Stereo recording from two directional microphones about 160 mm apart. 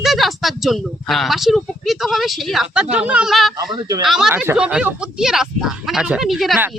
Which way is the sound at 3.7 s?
20° right (ahead or behind).